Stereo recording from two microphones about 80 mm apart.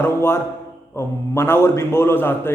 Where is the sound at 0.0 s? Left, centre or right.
Left.